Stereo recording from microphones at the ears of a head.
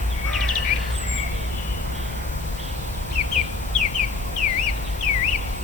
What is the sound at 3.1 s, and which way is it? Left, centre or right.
Bird, left.